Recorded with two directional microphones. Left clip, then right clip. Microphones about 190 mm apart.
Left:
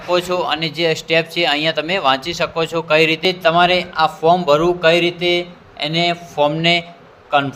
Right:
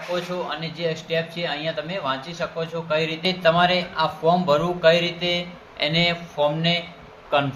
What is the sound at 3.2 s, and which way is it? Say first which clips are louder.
A man's voice: left 5 dB; 40° left (ahead or behind).